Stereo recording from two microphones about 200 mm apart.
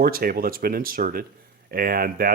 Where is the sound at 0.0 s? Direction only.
50° right (ahead or behind).